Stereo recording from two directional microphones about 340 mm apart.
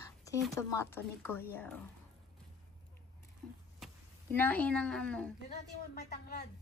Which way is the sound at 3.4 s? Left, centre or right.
Centre.